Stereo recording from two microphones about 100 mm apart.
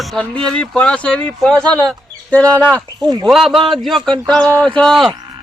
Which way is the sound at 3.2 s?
Centre (ahead or behind).